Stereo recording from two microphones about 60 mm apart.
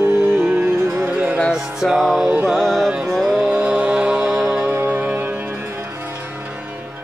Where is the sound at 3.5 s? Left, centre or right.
Right.